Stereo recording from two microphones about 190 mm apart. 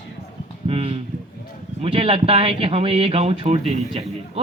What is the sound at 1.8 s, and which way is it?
Speech, 30° right (ahead or behind).